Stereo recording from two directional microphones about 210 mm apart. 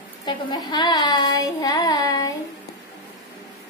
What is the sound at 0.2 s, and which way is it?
Child singing, 20° left (ahead or behind).